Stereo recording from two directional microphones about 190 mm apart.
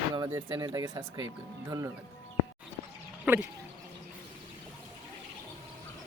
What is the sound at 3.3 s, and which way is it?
Speech, 10° right (ahead or behind).